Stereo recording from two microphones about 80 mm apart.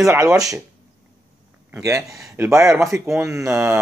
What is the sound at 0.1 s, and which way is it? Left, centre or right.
Speech, right.